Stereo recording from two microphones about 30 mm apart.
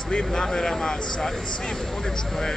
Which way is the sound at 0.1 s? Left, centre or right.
Left.